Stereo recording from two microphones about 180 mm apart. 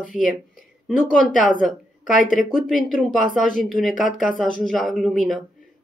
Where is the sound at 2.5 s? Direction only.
Centre (ahead or behind).